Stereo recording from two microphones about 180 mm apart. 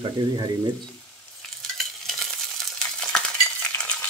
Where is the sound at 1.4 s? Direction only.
Centre (ahead or behind).